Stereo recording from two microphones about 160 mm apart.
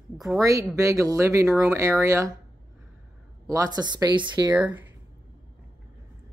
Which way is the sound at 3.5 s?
25° right (ahead or behind).